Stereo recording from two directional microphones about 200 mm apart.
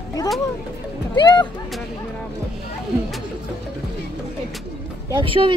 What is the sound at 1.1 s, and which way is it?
Speech, 20° left (ahead or behind).